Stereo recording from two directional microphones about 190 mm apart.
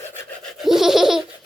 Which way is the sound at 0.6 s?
Centre (ahead or behind).